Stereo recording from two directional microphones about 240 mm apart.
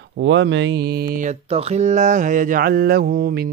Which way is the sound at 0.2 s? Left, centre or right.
Right.